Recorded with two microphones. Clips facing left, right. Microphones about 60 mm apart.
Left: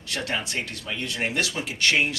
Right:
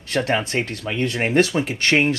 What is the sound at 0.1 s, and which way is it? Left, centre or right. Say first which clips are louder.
Speech: right 8 dB; right.